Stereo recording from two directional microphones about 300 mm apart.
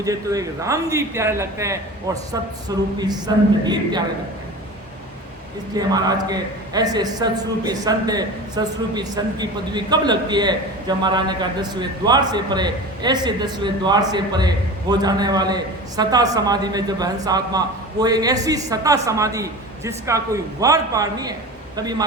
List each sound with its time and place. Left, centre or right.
0.0 s a man's voice: centre
5.7 s a man's voice: centre